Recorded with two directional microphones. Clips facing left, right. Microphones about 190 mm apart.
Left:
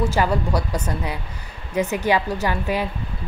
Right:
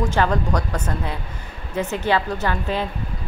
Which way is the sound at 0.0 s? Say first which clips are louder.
Even; 10° left (ahead or behind).